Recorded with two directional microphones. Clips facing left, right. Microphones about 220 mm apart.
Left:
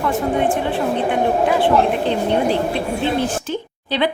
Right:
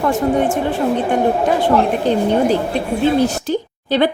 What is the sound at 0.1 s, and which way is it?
Speech, 45° right (ahead or behind).